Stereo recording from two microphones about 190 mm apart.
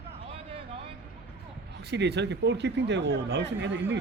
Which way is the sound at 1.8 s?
60° right (ahead or behind).